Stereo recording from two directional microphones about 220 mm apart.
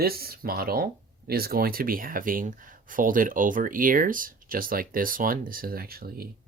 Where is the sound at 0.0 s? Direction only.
45° right (ahead or behind).